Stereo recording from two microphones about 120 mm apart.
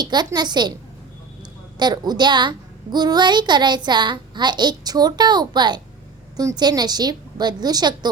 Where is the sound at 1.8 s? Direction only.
35° right (ahead or behind).